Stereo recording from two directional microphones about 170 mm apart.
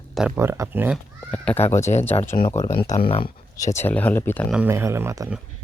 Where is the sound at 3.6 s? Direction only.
15° left (ahead or behind).